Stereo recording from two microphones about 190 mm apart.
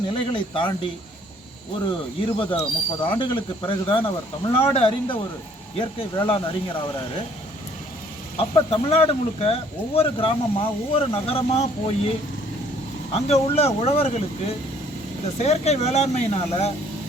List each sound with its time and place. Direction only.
0.1 s speech: 25° left (ahead or behind)
2.2 s speech: 25° left (ahead or behind)
8.4 s speech: 30° left (ahead or behind)
13.1 s speech: 35° left (ahead or behind)
15.4 s speech: 35° left (ahead or behind)